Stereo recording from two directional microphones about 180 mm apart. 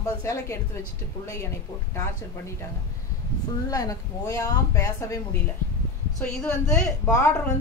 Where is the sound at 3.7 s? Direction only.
20° left (ahead or behind).